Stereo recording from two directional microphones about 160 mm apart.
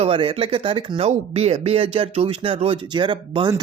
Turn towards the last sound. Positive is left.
turn(degrees=-30)  # may be behind; listen again after turning